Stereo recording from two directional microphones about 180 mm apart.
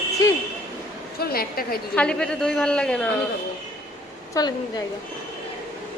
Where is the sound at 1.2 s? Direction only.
55° left (ahead or behind).